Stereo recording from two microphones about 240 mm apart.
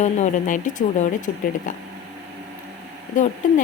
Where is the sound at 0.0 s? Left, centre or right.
Left.